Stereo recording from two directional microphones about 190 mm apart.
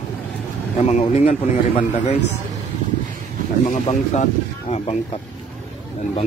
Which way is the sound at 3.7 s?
40° left (ahead or behind).